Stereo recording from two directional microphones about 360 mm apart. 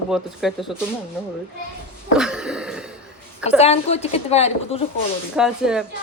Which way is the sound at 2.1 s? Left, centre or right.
Centre.